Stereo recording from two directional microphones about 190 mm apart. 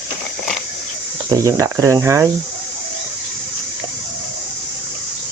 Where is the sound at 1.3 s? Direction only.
15° right (ahead or behind).